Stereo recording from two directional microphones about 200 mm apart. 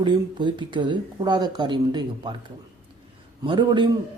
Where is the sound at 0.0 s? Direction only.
25° right (ahead or behind).